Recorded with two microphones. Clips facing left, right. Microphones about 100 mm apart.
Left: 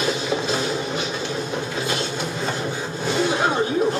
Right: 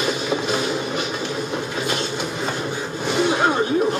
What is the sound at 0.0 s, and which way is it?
Music, 10° right (ahead or behind).